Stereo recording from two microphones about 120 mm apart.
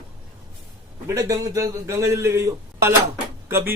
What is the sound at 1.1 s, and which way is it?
A man's voice, 30° right (ahead or behind).